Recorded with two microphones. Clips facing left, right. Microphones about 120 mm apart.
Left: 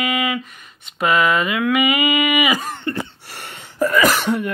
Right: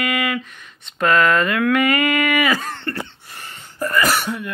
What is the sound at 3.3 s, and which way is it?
Sneeze, 80° left.